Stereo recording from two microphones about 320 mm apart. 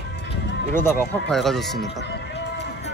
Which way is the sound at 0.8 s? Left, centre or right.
Centre.